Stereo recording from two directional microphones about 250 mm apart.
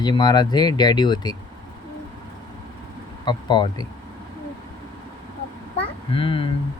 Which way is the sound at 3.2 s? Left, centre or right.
Centre.